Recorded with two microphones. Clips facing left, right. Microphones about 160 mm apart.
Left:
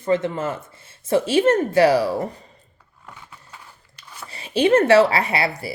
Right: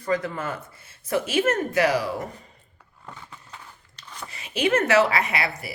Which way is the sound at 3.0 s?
10° left (ahead or behind).